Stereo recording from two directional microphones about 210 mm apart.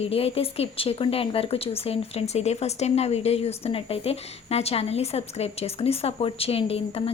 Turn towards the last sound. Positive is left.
turn(degrees=25)  # may be behind; listen again after turning